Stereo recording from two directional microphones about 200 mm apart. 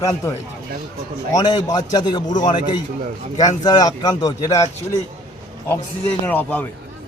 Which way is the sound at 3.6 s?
20° left (ahead or behind).